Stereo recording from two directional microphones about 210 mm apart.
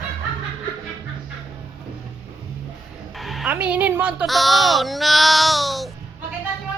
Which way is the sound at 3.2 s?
Centre (ahead or behind).